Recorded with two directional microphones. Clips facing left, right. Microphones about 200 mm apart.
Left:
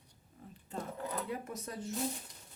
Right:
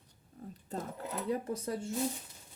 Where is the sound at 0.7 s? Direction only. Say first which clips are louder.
Even; 40° right (ahead or behind).